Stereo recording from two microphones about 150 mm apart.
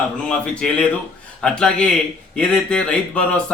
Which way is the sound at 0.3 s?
5° left (ahead or behind).